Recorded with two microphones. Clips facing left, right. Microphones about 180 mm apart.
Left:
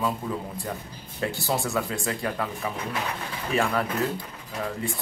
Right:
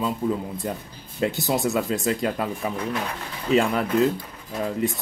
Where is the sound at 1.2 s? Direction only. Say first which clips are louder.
Right 4 dB; 20° right (ahead or behind).